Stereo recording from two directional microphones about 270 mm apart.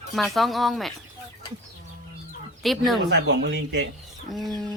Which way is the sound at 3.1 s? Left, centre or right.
Right.